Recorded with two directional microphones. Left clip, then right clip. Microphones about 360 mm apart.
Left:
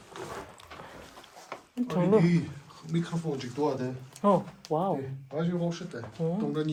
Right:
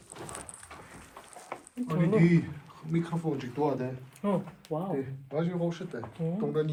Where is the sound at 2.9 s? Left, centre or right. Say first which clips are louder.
Right 1 dB; centre.